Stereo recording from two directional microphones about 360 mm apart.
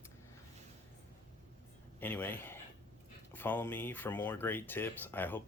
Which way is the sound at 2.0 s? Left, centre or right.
Centre.